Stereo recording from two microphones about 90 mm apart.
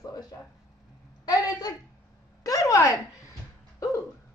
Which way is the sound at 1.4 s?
40° left (ahead or behind).